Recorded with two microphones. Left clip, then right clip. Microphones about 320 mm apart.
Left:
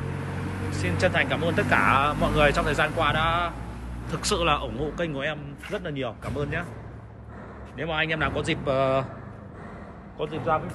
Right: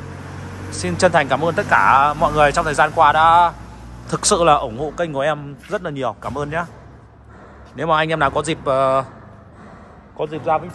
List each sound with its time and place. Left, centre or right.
0.7 s speech: centre
7.9 s speech: centre
10.1 s speech: centre